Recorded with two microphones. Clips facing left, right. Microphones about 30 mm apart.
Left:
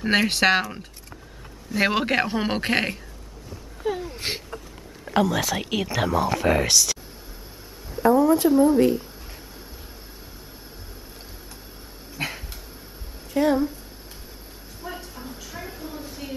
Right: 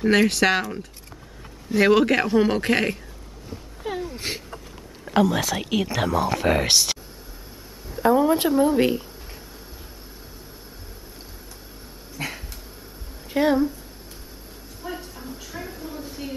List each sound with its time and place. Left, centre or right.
0.0 s a man's voice: centre
1.8 s a man's voice: centre
3.8 s a sound: centre
4.1 s a man's voice: centre
5.0 s speech: centre
6.6 s speech: right
8.0 s speech: right
12.2 s dog: left
13.4 s speech: right
14.8 s a sound: centre